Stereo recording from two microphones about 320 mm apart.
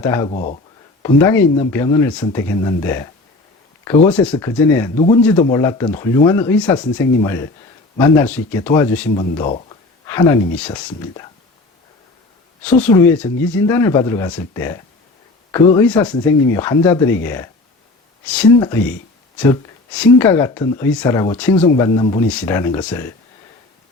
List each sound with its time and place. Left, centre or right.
0.0 s speech: centre
0.3 s speech: left
1.0 s speech: centre
12.6 s speech: centre
19.9 s speech: centre